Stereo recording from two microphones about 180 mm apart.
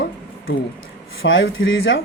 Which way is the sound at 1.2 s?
90° left.